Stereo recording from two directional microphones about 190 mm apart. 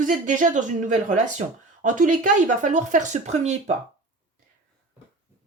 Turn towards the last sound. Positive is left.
turn(degrees=-35)  # may be behind; listen again after turning